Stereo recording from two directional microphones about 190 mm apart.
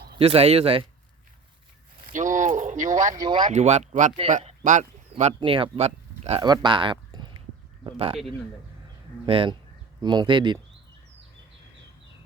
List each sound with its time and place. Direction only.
0.2 s speech: 30° right (ahead or behind)
2.1 s a sound: 40° right (ahead or behind)
3.2 s speech: 25° right (ahead or behind)
3.4 s speech: 35° right (ahead or behind)
5.4 s speech: 25° right (ahead or behind)
6.4 s speech: 25° right (ahead or behind)
9.2 s speech: 25° right (ahead or behind)